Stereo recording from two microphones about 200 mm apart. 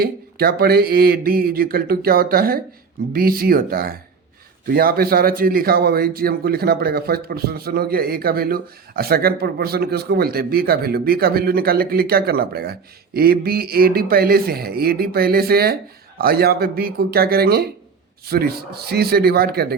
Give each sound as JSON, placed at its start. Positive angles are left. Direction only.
{"t": 0.0, "sound": "a man's voice", "side_deg": -50}